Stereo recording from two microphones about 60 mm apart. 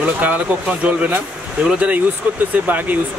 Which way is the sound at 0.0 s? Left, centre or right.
Right.